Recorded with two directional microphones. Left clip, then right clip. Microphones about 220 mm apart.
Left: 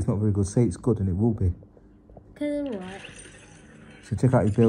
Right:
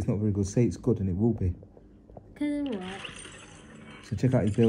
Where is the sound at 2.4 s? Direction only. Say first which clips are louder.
Left 3 dB; 40° right (ahead or behind).